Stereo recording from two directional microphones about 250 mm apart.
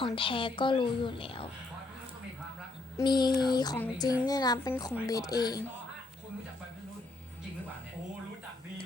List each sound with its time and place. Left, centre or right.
0.0 s a woman's voice: left
3.0 s speech: centre